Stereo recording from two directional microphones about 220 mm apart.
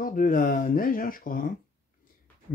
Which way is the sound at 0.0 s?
40° left (ahead or behind).